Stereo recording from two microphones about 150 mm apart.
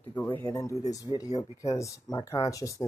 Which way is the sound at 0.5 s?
20° left (ahead or behind).